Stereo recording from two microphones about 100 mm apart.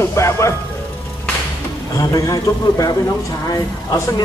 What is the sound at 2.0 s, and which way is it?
A man's voice, 35° left (ahead or behind).